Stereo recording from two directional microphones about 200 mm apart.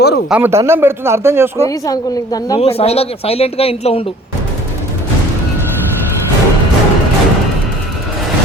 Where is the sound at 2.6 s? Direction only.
30° left (ahead or behind).